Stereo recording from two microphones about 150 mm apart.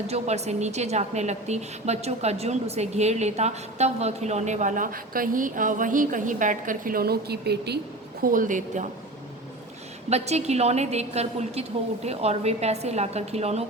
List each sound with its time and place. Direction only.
0.1 s a woman's voice: 45° right (ahead or behind); by 7.8 s 90° right
8.2 s a woman's voice: 65° right (ahead or behind)
10.1 s a woman's voice: 45° right (ahead or behind)